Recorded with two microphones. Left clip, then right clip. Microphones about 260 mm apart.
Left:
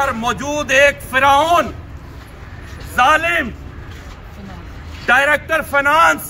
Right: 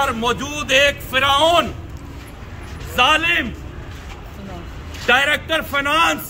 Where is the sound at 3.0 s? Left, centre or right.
Centre.